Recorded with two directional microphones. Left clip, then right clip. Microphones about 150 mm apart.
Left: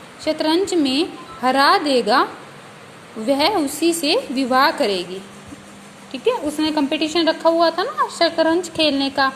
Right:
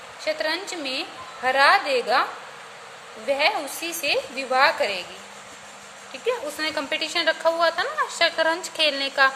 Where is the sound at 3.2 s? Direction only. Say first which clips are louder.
Left 4 dB; 35° left (ahead or behind).